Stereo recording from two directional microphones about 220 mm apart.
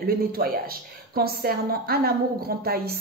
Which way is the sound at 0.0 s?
45° right (ahead or behind).